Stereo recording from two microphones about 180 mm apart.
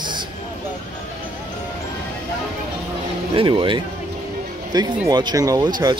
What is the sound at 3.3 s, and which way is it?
Speech, 30° right (ahead or behind).